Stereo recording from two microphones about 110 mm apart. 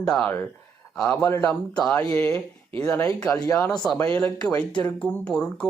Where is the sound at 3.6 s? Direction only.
10° left (ahead or behind).